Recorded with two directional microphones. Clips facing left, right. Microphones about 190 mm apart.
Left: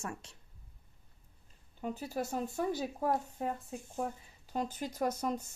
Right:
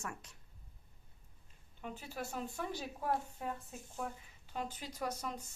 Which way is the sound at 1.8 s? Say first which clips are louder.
Left 7 dB; 40° left (ahead or behind).